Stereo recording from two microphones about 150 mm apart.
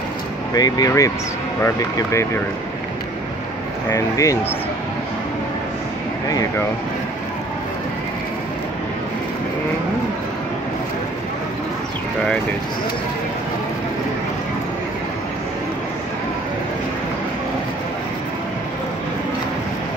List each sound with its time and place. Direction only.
0.6 s speech: 25° left (ahead or behind)
3.9 s speech: 20° left (ahead or behind)